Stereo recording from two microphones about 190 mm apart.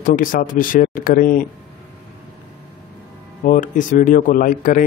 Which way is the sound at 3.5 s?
45° left (ahead or behind).